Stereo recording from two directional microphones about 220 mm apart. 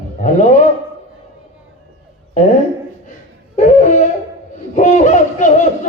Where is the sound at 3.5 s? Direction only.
35° left (ahead or behind).